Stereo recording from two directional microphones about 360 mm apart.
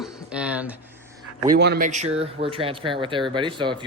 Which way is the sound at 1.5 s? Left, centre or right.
Right.